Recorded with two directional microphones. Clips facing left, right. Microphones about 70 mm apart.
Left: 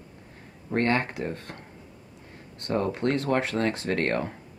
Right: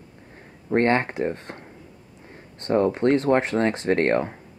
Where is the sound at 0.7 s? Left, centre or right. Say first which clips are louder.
Right 5 dB; right.